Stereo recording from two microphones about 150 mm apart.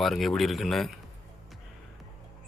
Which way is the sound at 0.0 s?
Centre (ahead or behind).